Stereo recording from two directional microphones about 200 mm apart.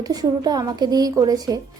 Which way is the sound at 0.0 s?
20° right (ahead or behind).